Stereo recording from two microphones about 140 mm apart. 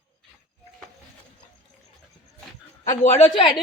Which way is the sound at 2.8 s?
50° left (ahead or behind).